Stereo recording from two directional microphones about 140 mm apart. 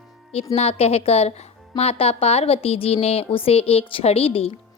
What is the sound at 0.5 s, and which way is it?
Speech, 45° left (ahead or behind).